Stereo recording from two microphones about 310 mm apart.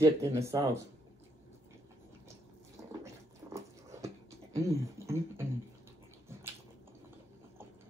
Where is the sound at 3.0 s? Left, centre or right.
Centre.